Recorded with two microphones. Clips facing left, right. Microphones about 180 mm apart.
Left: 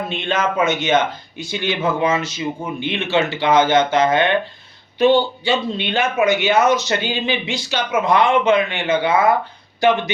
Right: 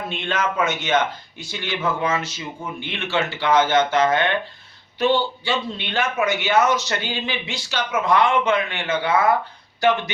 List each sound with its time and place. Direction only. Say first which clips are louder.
0.1 s speech: left 2 dB; 20° left (ahead or behind)